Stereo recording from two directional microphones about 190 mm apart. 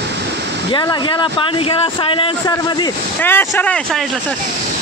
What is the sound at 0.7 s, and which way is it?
Speech, 25° left (ahead or behind).